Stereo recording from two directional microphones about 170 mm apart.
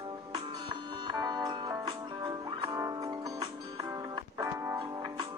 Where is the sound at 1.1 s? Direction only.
25° right (ahead or behind).